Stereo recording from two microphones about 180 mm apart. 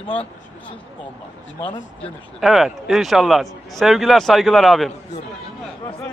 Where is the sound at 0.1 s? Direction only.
30° left (ahead or behind).